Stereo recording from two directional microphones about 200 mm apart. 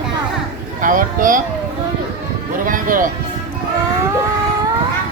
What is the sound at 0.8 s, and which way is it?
Speech, 40° right (ahead or behind).